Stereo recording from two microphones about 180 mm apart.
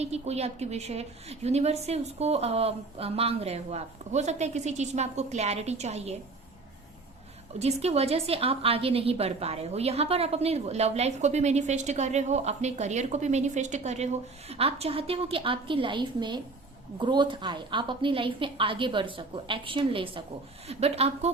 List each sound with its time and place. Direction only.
0.0 s a woman's voice: 35° right (ahead or behind)
7.6 s a woman's voice: 35° right (ahead or behind)